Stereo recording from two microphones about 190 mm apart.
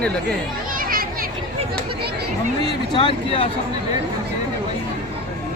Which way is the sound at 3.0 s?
30° left (ahead or behind).